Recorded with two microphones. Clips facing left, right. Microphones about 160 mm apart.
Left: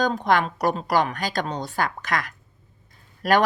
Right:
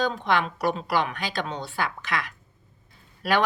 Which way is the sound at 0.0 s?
45° left (ahead or behind).